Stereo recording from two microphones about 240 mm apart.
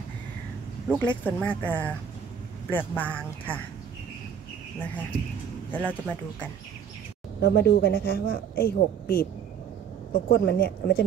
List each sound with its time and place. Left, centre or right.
0.9 s speech: centre
5.7 s speech: centre
7.4 s a woman's voice: left